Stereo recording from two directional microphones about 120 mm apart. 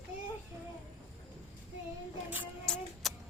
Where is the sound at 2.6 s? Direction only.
5° left (ahead or behind).